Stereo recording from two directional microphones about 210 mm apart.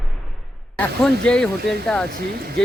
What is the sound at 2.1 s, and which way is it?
Speech, 45° right (ahead or behind).